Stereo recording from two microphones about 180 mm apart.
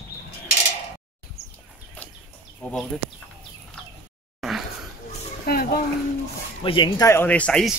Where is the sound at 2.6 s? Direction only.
5° left (ahead or behind).